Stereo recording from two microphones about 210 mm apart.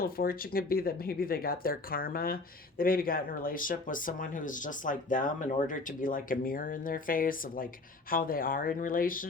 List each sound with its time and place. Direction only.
0.0 s speech: 45° left (ahead or behind)